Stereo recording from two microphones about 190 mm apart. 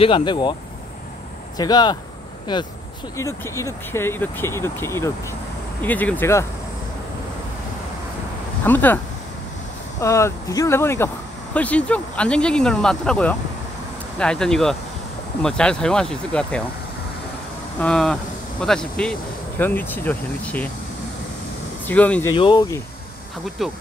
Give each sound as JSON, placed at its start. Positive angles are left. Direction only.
{"t": 0.0, "sound": "speech", "side_deg": 25}
{"t": 1.6, "sound": "speech", "side_deg": 20}
{"t": 8.6, "sound": "speech", "side_deg": 10}
{"t": 17.7, "sound": "speech", "side_deg": 5}
{"t": 21.8, "sound": "speech", "side_deg": 10}
{"t": 22.3, "sound": "speech", "side_deg": 25}
{"t": 23.6, "sound": "speech", "side_deg": 0}